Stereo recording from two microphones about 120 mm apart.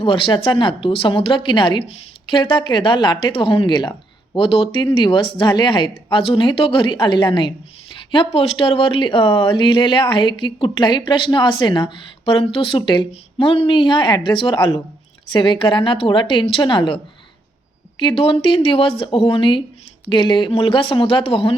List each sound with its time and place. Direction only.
0.0 s speech: 50° left (ahead or behind)
1.8 s speech: 55° left (ahead or behind)
13.1 s speech: 55° left (ahead or behind)
18.0 s speech: 50° left (ahead or behind)